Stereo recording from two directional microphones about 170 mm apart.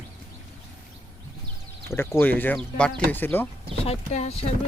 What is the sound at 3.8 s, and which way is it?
Speech, 40° left (ahead or behind).